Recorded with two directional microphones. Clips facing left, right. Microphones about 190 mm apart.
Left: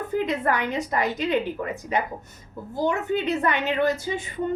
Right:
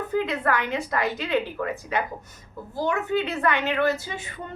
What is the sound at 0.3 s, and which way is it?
A woman's voice, 20° left (ahead or behind).